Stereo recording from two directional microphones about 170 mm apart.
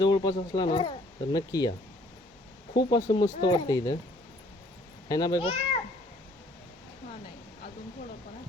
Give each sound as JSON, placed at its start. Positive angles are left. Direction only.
{"t": 0.0, "sound": "speech", "side_deg": 25}
{"t": 2.7, "sound": "speech", "side_deg": 25}
{"t": 5.0, "sound": "speech", "side_deg": 20}